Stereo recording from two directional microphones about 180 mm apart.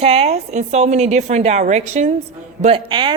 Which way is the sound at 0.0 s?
35° right (ahead or behind).